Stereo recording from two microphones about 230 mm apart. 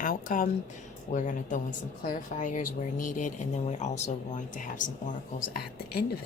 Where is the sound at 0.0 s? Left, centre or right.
Left.